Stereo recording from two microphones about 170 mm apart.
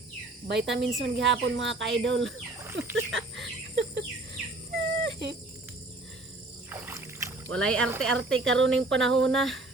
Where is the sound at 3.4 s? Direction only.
75° right (ahead or behind).